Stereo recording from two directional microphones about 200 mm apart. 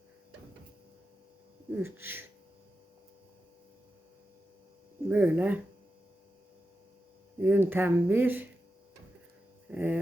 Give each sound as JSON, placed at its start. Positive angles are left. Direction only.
{"t": 1.7, "sound": "speech", "side_deg": -10}
{"t": 5.0, "sound": "speech", "side_deg": -10}
{"t": 7.4, "sound": "speech", "side_deg": -10}
{"t": 9.6, "sound": "a sound", "side_deg": -10}